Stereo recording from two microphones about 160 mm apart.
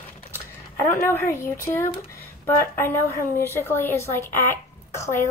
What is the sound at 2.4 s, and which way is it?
A woman's voice, 15° left (ahead or behind).